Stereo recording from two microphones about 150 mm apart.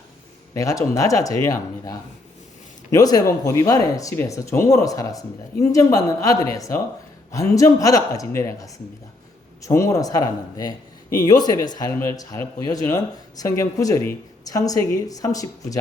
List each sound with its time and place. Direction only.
0.5 s speech: 20° left (ahead or behind)